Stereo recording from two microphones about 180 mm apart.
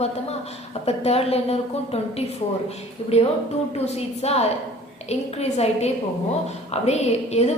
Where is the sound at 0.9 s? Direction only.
35° left (ahead or behind).